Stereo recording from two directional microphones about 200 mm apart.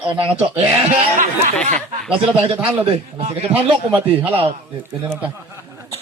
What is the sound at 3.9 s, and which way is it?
Speech, 10° right (ahead or behind).